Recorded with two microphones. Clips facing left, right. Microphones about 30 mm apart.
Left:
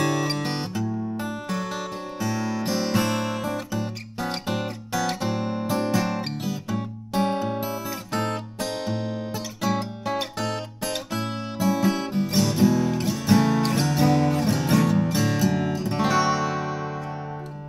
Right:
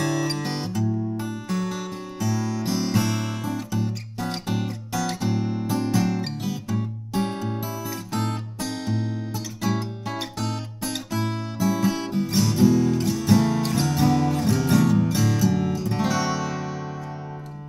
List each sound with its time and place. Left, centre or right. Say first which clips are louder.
0.0 s music: left 1 dB; centre